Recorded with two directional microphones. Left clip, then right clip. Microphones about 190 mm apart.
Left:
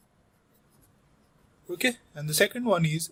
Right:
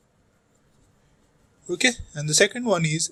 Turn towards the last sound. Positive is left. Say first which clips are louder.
# right 3 dB
turn(degrees=-10)  # may be behind; listen again after turning